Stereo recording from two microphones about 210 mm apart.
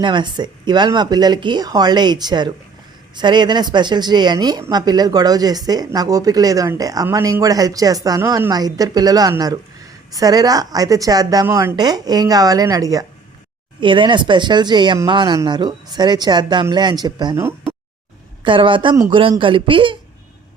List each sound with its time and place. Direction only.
0.0 s a woman's voice: 20° right (ahead or behind)